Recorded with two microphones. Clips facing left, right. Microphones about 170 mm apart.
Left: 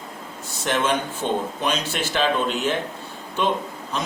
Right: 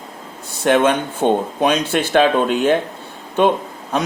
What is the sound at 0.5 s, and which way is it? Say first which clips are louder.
A man's voice: right 8 dB; 55° right (ahead or behind).